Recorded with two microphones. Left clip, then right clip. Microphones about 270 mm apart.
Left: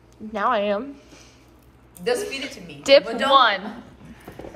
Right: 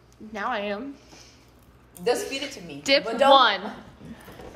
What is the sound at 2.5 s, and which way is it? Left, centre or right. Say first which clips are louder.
Speech: right 1 dB; right.